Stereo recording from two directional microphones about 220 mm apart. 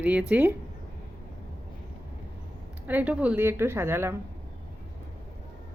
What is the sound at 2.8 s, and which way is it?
Speech, 5° right (ahead or behind).